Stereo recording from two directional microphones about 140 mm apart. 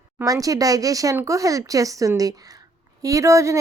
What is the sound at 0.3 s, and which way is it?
Speech, 25° right (ahead or behind).